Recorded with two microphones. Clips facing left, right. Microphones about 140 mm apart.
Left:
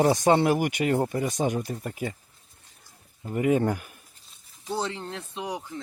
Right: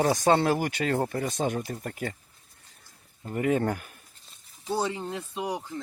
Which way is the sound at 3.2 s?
10° left (ahead or behind).